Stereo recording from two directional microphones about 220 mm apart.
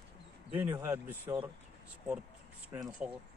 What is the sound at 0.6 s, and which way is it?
Speech, 10° right (ahead or behind).